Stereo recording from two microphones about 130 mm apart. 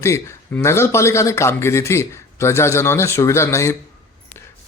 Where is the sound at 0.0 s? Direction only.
20° left (ahead or behind).